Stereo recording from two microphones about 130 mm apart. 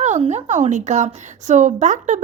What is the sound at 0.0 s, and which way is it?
A woman's voice, 60° right (ahead or behind).